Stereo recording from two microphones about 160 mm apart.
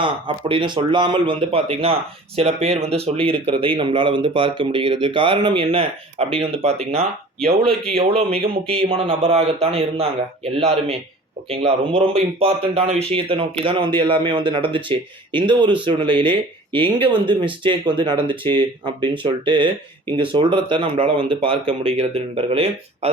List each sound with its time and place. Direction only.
0.0 s speech: 30° right (ahead or behind)